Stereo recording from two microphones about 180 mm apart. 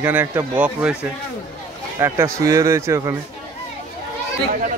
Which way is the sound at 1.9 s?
15° right (ahead or behind).